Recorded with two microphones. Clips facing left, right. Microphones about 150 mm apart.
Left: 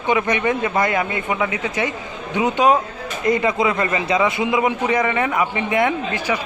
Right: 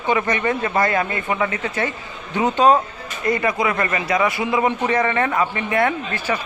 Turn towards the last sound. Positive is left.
turn(degrees=15)  # may be behind; listen again after turning